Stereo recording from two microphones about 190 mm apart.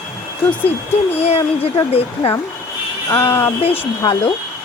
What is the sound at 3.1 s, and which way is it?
Speech, 15° left (ahead or behind).